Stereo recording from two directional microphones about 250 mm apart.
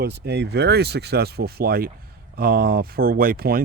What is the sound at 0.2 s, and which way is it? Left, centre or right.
Speech, right.